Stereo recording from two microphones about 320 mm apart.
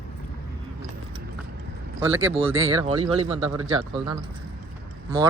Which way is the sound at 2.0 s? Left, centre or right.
Centre.